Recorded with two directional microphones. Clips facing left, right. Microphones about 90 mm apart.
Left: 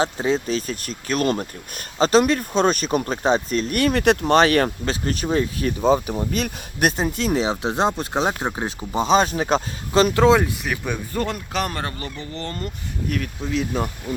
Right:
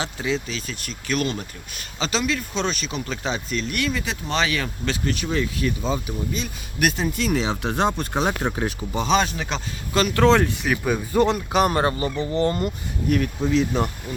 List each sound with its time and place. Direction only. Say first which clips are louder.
0.0 s speech: left 5 dB; 40° left (ahead or behind)
3.9 s speech: left 10 dB; 65° left (ahead or behind)
4.9 s speech: left 2 dB; 40° left (ahead or behind); by 6.5 s 60° left (ahead or behind)
6.7 s speech: left 2 dB; 35° left (ahead or behind)
9.3 s speech: left 8 dB; 45° left (ahead or behind)
9.9 s speech: left 4 dB; 25° left (ahead or behind)
10.2 s speech: left 1 dB; 10° left (ahead or behind)
11.2 s speech: right 7 dB; 15° right (ahead or behind)
13.1 s speech: right 5 dB; 5° right (ahead or behind)